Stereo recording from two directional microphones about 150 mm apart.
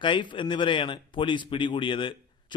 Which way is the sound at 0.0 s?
30° left (ahead or behind).